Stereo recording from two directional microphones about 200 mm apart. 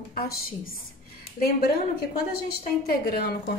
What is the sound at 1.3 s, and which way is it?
A woman's voice, 50° left (ahead or behind).